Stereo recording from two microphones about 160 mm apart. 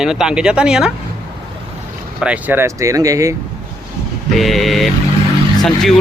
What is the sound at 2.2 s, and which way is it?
Speech, 10° right (ahead or behind).